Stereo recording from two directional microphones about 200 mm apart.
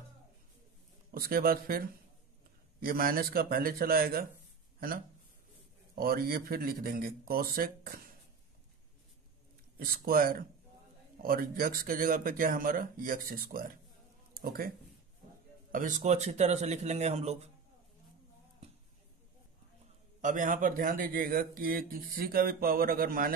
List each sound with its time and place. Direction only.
1.1 s a man's voice: 50° right (ahead or behind)
9.8 s a man's voice: 45° right (ahead or behind)
15.7 s speech: 40° right (ahead or behind)
20.2 s a man's voice: 40° right (ahead or behind)